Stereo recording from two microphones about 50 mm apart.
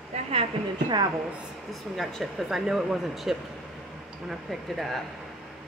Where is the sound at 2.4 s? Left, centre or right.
Centre.